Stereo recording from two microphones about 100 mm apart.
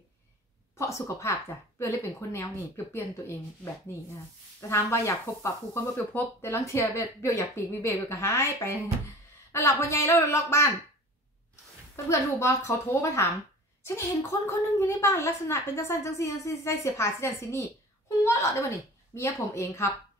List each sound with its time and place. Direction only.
0.7 s a woman's voice: 30° left (ahead or behind)
4.6 s a woman's voice: 30° left (ahead or behind)
12.1 s a woman's voice: 30° left (ahead or behind)
18.2 s a sound: 30° left (ahead or behind)
19.1 s a woman's voice: 30° left (ahead or behind)